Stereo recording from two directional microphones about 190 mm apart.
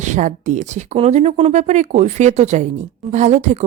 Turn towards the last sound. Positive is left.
turn(degrees=-35)  # may be behind; listen again after turning